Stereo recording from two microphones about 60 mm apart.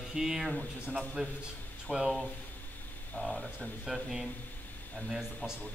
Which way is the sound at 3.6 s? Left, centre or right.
Centre.